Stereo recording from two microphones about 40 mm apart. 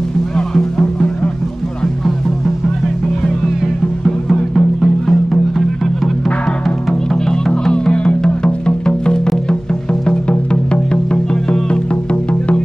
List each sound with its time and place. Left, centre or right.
4.0 s music: centre
7.2 s music: centre
7.7 s music: left